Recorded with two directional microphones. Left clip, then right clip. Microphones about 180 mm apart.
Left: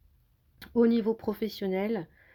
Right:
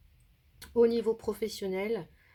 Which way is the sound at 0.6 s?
35° left (ahead or behind).